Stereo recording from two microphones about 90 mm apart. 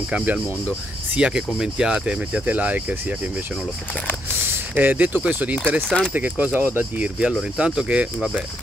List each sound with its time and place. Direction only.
0.1 s speech: 15° right (ahead or behind)
4.5 s speech: 20° right (ahead or behind)
5.8 s speech: 5° left (ahead or behind)
6.1 s speech: 20° right (ahead or behind)